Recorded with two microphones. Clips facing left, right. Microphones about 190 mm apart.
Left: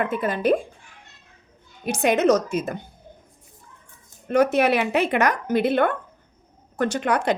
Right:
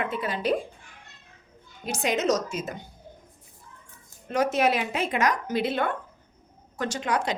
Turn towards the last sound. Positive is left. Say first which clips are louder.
# left 6 dB
turn(degrees=55)  # may be behind; listen again after turning